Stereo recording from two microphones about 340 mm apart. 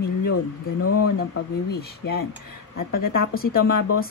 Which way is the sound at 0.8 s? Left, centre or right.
Left.